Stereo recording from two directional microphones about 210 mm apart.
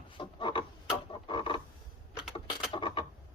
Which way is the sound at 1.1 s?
25° left (ahead or behind).